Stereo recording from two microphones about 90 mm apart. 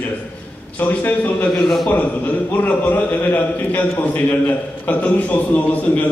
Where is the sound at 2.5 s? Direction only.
20° left (ahead or behind).